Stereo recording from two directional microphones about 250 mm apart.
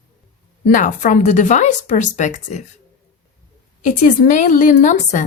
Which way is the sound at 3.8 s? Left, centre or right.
Left.